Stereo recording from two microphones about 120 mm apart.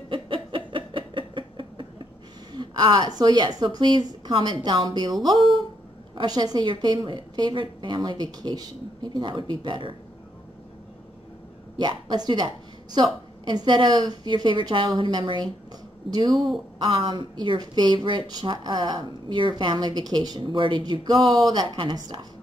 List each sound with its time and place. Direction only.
0.1 s a sound: 45° right (ahead or behind)
2.5 s a woman's voice: 40° right (ahead or behind)
6.1 s a woman's voice: 35° right (ahead or behind)
11.7 s a woman's voice: 35° right (ahead or behind)
16.7 s a woman's voice: 45° right (ahead or behind)